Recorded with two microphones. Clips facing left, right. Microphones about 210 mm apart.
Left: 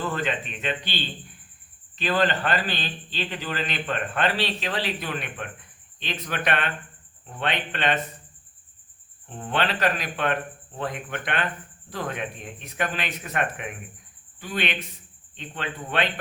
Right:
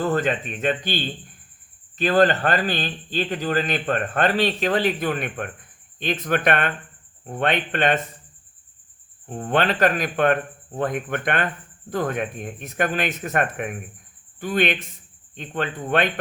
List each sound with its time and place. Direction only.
0.0 s a man's voice: 45° right (ahead or behind)
9.3 s a man's voice: 45° right (ahead or behind)